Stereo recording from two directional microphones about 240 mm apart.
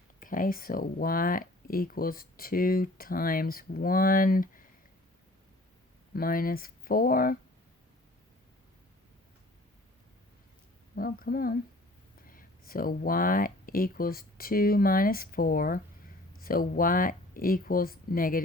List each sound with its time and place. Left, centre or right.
0.2 s speech: left
6.1 s speech: left
10.9 s speech: left